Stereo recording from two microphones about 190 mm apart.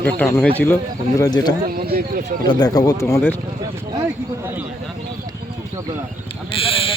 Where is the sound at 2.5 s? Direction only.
20° left (ahead or behind).